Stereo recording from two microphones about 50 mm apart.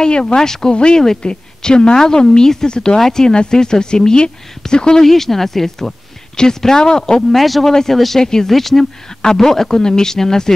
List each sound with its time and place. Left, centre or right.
0.0 s speech: centre
7.2 s speech: centre